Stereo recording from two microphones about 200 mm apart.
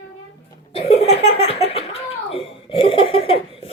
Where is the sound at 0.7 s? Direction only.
30° left (ahead or behind).